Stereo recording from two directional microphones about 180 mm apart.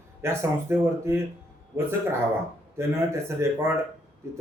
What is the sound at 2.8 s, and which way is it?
Speech, 15° right (ahead or behind).